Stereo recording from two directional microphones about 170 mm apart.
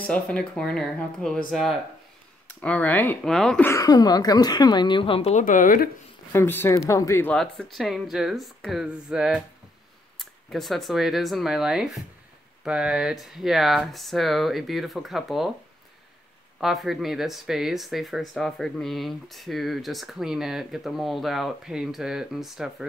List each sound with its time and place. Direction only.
0.0 s speech: 5° left (ahead or behind)
3.7 s a woman's voice: 20° left (ahead or behind)
5.4 s speech: 50° left (ahead or behind)
6.3 s speech: 15° left (ahead or behind)
7.3 s speech: centre (ahead or behind)
16.5 s speech: centre (ahead or behind)